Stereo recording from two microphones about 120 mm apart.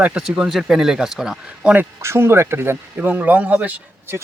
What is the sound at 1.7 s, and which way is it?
Speech, 20° right (ahead or behind).